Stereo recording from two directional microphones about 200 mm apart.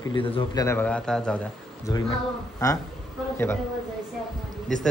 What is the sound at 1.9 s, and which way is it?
Speech, 15° left (ahead or behind).